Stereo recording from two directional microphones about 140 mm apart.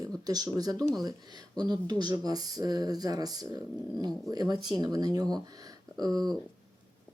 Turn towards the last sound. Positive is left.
turn(degrees=-30)  # may be behind; listen again after turning